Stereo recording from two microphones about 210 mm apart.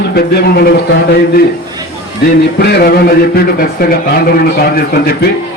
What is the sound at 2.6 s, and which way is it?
A man's voice, 50° left (ahead or behind).